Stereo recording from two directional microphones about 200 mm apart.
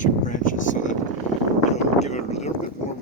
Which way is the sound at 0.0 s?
40° left (ahead or behind).